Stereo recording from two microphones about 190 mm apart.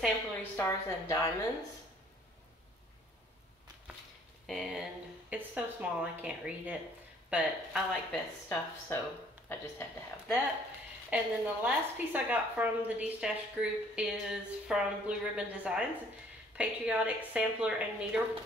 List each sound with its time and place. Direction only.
0.4 s a woman's voice: 15° left (ahead or behind)
4.5 s a woman's voice: centre (ahead or behind)
8.5 s a woman's voice: 10° left (ahead or behind)
11.1 s a woman's voice: 10° right (ahead or behind)